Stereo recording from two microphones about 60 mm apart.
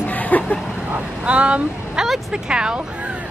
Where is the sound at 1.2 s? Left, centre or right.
Centre.